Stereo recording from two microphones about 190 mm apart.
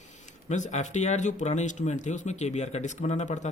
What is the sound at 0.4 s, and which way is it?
Speech, 40° left (ahead or behind).